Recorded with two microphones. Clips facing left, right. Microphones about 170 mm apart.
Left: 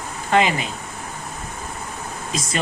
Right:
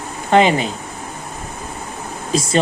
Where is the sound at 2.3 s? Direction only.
30° right (ahead or behind).